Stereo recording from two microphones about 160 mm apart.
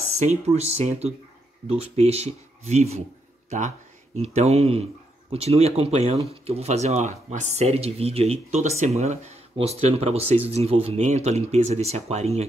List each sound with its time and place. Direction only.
0.3 s speech: 40° right (ahead or behind)